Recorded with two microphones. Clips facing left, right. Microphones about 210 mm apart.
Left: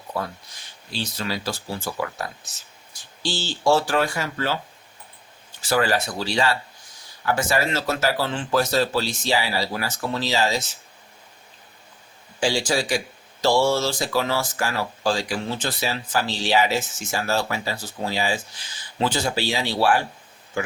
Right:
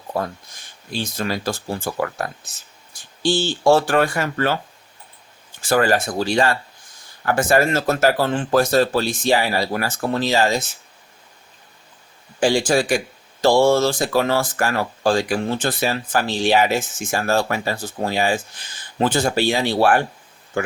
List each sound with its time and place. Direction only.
0.9 s speech: 50° right (ahead or behind)
5.6 s speech: 50° right (ahead or behind)
12.4 s speech: 55° right (ahead or behind)